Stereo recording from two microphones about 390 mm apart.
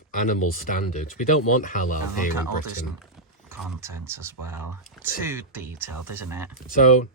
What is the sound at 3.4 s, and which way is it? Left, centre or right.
Speech, centre.